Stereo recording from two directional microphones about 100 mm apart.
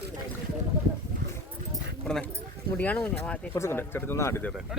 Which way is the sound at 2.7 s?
15° left (ahead or behind).